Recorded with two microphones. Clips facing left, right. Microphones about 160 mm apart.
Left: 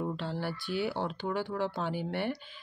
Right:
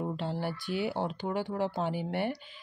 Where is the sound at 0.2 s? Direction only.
45° right (ahead or behind).